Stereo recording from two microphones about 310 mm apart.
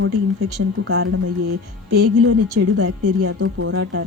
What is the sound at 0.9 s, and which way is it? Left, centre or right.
Speech, right.